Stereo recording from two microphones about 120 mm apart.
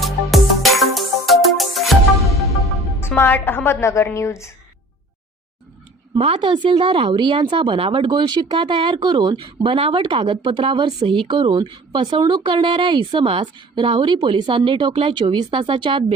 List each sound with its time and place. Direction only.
0.0 s music: centre (ahead or behind)
3.2 s a woman's voice: 15° left (ahead or behind)
6.1 s speech: 50° right (ahead or behind)